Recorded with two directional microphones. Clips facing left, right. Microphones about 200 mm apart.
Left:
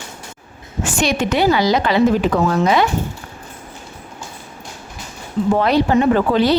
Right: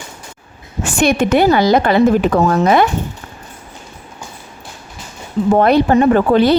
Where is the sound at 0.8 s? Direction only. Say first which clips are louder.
Right 5 dB; 55° right (ahead or behind).